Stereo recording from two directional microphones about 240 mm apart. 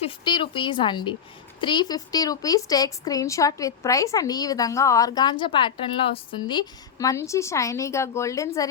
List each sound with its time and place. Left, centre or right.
0.0 s speech: centre